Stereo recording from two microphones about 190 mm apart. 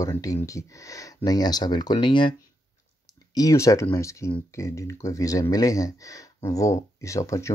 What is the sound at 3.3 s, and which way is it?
Speech, 15° left (ahead or behind).